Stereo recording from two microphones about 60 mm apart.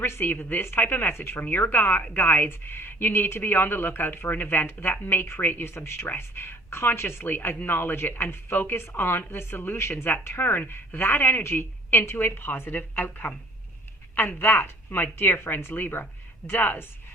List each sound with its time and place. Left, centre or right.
0.0 s speech: left
5.7 s speech: left